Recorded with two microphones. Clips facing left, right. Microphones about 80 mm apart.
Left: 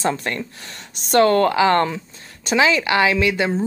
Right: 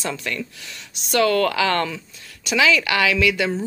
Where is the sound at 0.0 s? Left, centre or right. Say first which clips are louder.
Left 5 dB; left.